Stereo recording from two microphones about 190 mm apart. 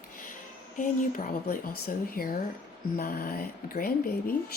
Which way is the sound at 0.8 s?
45° left (ahead or behind).